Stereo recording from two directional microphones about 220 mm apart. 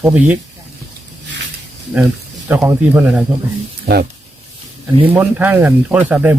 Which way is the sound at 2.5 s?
5° right (ahead or behind).